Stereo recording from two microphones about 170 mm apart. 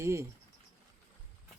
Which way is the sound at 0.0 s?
15° right (ahead or behind).